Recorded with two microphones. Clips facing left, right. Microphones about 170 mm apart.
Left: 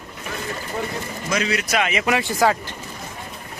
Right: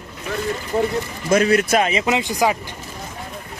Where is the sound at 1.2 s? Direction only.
50° right (ahead or behind).